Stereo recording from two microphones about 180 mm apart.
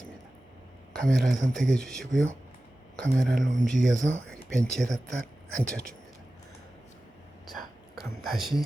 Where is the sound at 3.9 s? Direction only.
90° right.